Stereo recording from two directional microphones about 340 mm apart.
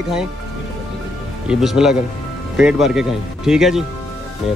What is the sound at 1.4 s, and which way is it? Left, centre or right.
Speech, centre.